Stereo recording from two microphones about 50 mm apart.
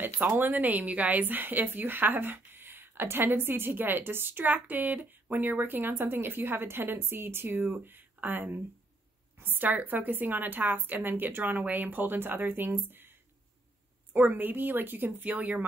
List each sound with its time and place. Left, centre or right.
0.0 s a woman's voice: right
14.1 s a woman's voice: right